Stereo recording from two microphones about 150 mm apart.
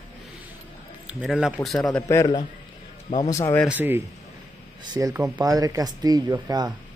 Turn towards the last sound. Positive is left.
turn(degrees=-25)  # may be behind; listen again after turning